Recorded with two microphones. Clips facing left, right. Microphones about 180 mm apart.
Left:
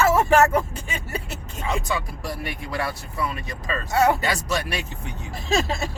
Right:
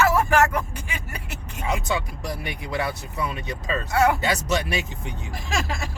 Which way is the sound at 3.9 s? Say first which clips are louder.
Left 1 dB; 25° left (ahead or behind).